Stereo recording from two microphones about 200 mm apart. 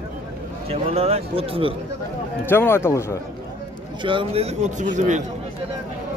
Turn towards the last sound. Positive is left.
turn(degrees=-35)  # may be behind; listen again after turning